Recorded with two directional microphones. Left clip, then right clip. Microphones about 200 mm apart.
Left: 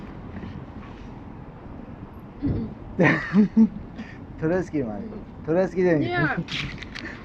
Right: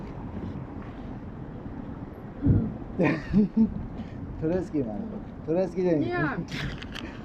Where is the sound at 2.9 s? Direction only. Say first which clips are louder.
Left 5 dB; 10° right (ahead or behind).